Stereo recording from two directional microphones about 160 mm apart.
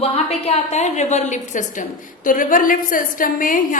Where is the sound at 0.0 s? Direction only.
40° left (ahead or behind).